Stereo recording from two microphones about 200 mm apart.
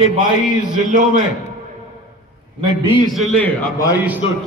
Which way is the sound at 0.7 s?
40° right (ahead or behind).